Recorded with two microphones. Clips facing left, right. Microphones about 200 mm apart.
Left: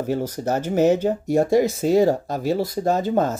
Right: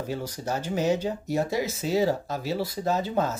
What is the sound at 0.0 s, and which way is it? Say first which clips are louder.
Speech: left 8 dB; 50° left (ahead or behind).